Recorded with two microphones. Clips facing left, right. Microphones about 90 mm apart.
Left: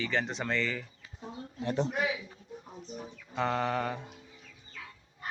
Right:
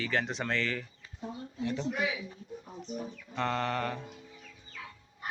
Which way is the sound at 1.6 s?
40° left (ahead or behind).